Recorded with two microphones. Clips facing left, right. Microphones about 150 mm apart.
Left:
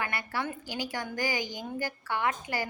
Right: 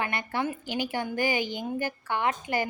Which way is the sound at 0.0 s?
20° right (ahead or behind).